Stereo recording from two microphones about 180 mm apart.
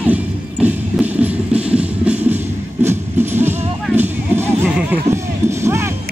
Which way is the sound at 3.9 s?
10° right (ahead or behind).